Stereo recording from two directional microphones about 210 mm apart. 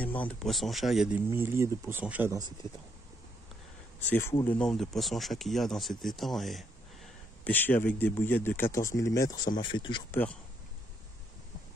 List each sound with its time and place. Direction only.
0.0 s speech: 5° left (ahead or behind); by 2.5 s 15° right (ahead or behind)
4.1 s speech: 10° left (ahead or behind)